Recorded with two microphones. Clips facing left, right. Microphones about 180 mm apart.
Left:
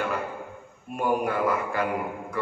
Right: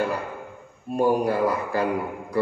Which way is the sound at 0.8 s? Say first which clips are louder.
Right 5 dB; 35° right (ahead or behind).